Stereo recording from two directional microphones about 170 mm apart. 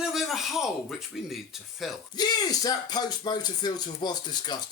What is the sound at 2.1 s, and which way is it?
Speech, 25° left (ahead or behind).